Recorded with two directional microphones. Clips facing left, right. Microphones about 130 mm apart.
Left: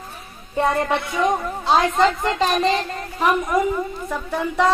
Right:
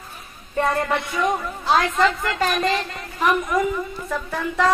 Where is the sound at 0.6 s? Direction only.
25° left (ahead or behind).